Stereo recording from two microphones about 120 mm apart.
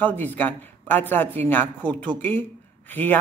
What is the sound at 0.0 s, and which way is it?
Speech, 15° left (ahead or behind).